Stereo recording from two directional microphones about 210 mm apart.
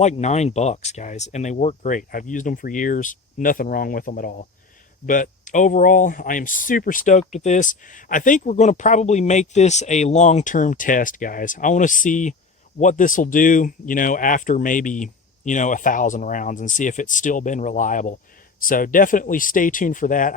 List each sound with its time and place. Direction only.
0.0 s speech: 35° left (ahead or behind)